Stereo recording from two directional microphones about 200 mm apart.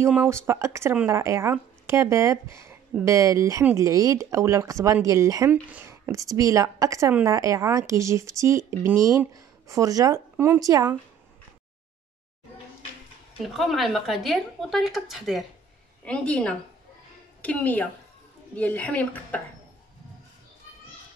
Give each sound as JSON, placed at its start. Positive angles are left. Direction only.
{"t": 0.0, "sound": "speech", "side_deg": -10}
{"t": 13.5, "sound": "a woman's voice", "side_deg": 0}